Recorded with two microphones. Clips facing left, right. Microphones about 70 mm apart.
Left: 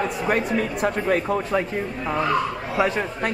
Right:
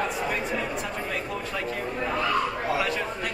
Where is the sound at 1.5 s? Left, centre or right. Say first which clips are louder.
Left 6 dB; left.